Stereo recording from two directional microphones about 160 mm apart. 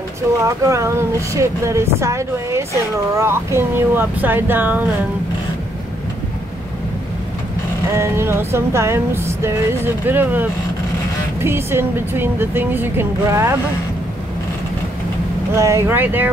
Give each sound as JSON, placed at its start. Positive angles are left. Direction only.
{"t": 0.4, "sound": "speech", "side_deg": -20}
{"t": 7.9, "sound": "speech", "side_deg": -15}
{"t": 11.4, "sound": "speech", "side_deg": -15}
{"t": 15.5, "sound": "speech", "side_deg": -20}